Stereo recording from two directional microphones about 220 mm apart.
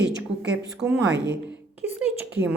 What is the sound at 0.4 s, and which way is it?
Speech, 50° right (ahead or behind).